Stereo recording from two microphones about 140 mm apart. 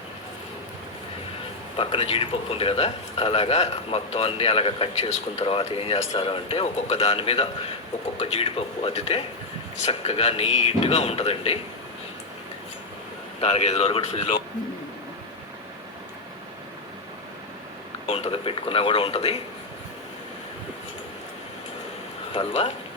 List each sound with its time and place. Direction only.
1.7 s speech: 40° left (ahead or behind)
13.4 s speech: 50° left (ahead or behind)
18.0 s speech: 45° left (ahead or behind)
22.3 s speech: 40° left (ahead or behind)